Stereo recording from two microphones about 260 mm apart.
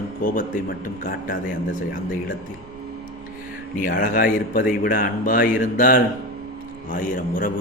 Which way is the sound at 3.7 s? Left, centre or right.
Left.